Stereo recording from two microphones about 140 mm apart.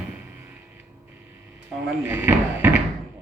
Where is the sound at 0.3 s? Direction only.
15° right (ahead or behind).